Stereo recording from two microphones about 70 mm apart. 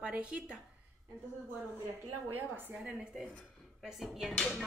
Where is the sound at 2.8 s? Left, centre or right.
Centre.